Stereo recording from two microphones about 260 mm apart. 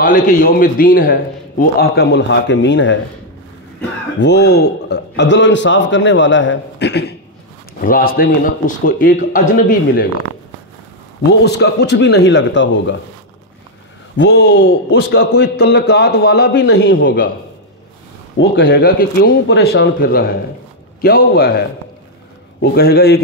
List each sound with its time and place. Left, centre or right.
0.0 s a man's voice: left
4.2 s a man's voice: left
11.2 s a man's voice: left
14.1 s a man's voice: left
18.4 s a man's voice: left